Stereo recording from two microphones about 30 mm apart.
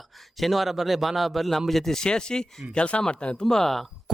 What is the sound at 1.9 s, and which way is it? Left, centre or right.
Speech, left.